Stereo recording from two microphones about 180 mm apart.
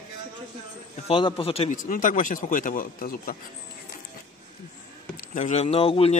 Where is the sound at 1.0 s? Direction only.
30° left (ahead or behind); by 3.4 s 55° left (ahead or behind).